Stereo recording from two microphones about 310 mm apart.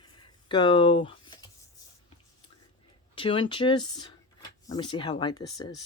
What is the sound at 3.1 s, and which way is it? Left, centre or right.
Speech, centre.